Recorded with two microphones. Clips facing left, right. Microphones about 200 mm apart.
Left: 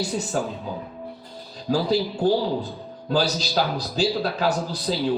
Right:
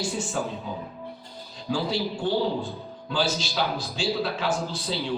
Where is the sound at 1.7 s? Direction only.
40° left (ahead or behind).